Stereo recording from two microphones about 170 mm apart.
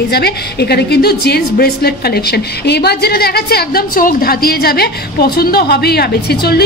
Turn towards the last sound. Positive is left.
turn(degrees=65)  # may be behind; listen again after turning